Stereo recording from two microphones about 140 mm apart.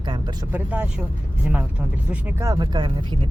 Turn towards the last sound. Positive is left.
turn(degrees=-30)  # may be behind; listen again after turning